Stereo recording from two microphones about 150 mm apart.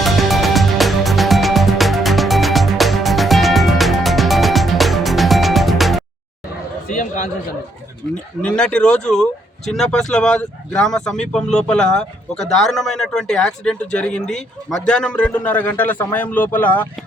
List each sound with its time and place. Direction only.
0.0 s music: centre (ahead or behind)
6.9 s a sound: 60° left (ahead or behind)
8.4 s speech: 5° left (ahead or behind)